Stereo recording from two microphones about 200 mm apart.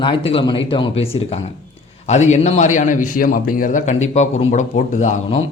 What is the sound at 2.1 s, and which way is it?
A man's voice, 35° left (ahead or behind).